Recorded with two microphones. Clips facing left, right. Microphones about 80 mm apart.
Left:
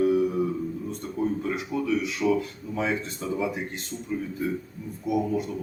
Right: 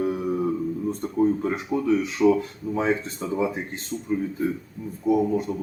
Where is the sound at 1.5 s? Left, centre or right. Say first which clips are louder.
Right 4 dB; right.